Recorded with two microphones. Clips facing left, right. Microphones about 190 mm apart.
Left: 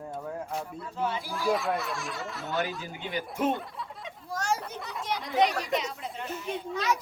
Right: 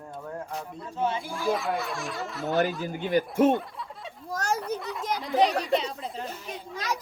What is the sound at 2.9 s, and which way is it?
Speech, 50° right (ahead or behind).